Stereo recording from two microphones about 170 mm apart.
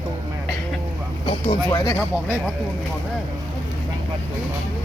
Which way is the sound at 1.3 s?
30° left (ahead or behind).